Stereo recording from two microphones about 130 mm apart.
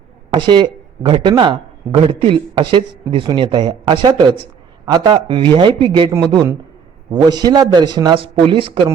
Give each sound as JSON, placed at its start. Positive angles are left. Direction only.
{"t": 0.3, "sound": "a man's voice", "side_deg": -35}